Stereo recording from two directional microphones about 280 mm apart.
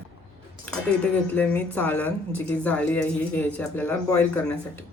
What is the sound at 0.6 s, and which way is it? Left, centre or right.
Speech, centre.